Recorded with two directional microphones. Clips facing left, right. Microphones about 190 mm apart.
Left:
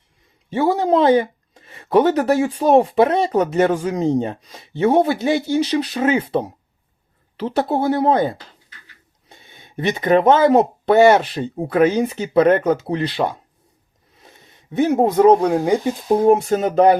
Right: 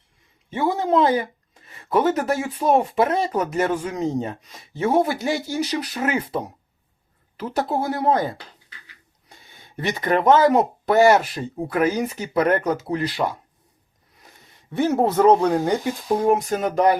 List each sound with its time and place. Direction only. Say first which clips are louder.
0.9 s speech: left 4 dB; 30° left (ahead or behind)
1.7 s a sound: left 5 dB; 25° left (ahead or behind)
2.4 s speech: left 6 dB; 30° left (ahead or behind)
7.3 s speech: left 4 dB; 25° left (ahead or behind)
9.3 s speech: left 5 dB; 20° left (ahead or behind)
16.0 s speech: left 5 dB; 25° left (ahead or behind)